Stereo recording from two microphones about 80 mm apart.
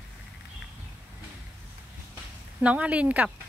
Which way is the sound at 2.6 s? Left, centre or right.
Centre.